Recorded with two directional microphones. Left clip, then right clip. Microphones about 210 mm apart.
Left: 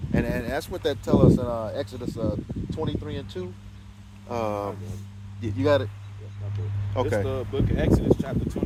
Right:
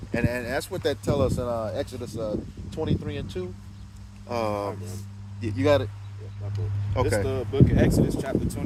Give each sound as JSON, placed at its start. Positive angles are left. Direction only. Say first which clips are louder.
{"t": 0.1, "sound": "speech", "louder": "even", "side_deg": 0}
{"t": 6.9, "sound": "speech", "louder": "even", "side_deg": 0}
{"t": 7.3, "sound": "speech", "louder": "right 3 dB", "side_deg": -20}